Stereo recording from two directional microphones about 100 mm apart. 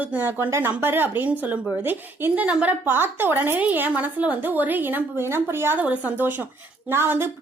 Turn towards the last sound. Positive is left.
turn(degrees=-25)  # may be behind; listen again after turning